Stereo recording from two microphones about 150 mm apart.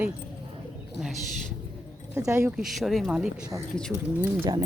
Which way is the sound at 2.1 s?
20° right (ahead or behind).